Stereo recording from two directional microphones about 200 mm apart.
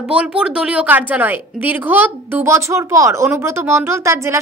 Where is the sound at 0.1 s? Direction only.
5° right (ahead or behind).